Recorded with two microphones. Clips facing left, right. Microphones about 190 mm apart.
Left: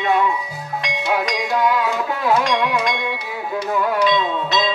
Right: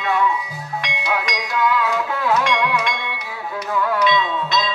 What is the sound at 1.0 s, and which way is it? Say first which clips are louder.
Music: left 4 dB; 35° left (ahead or behind).